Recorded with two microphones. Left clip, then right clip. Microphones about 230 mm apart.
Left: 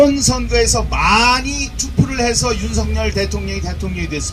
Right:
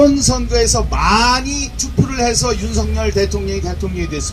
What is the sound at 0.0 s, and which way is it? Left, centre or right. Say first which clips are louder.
Speech: even; left.